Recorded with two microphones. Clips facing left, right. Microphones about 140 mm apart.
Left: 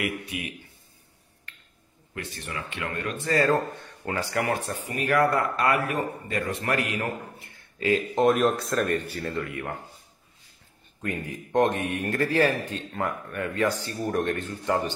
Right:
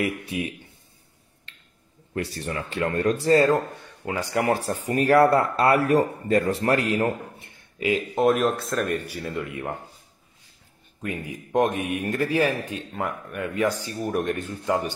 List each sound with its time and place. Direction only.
0.0 s speech: 30° right (ahead or behind)
2.1 s speech: 35° right (ahead or behind); by 4.5 s 15° right (ahead or behind)
4.5 s speech: 35° right (ahead or behind); by 9.8 s 20° right (ahead or behind)
11.0 s speech: 10° right (ahead or behind)